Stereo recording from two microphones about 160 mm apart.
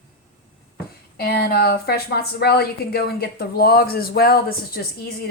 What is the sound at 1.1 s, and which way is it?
Speech, 80° left.